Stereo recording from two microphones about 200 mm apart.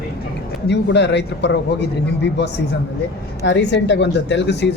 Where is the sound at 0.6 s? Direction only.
60° left (ahead or behind).